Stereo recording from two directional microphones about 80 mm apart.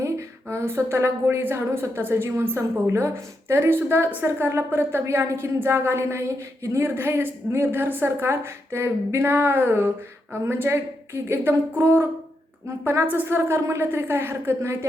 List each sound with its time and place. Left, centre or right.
0.4 s a woman's voice: right